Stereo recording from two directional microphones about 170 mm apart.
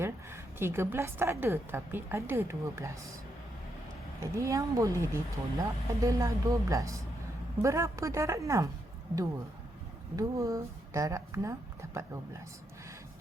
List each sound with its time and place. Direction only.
0.0 s a woman's voice: 15° right (ahead or behind)
4.2 s speech: 20° right (ahead or behind)
10.2 s speech: 20° right (ahead or behind)